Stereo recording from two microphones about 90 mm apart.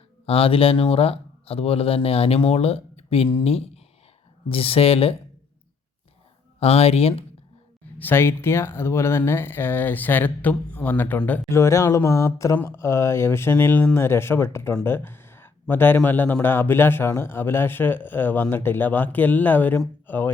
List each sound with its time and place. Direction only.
0.3 s speech: 90° left
6.6 s speech: 90° left
7.9 s speech: 25° left (ahead or behind)
11.4 s speech: 30° left (ahead or behind)
14.8 s a sound: 25° left (ahead or behind)
16.0 s speech: 20° left (ahead or behind)